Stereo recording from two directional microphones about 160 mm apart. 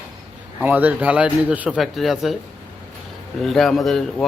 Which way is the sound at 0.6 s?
10° right (ahead or behind).